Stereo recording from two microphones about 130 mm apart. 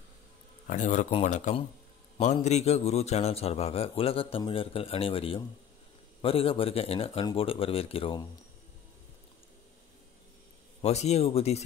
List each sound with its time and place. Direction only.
0.7 s a man's voice: 70° left (ahead or behind); by 8.2 s 45° left (ahead or behind)
10.8 s a man's voice: 55° left (ahead or behind)